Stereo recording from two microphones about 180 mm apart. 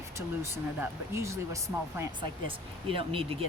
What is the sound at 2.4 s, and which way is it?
Speech, 30° right (ahead or behind).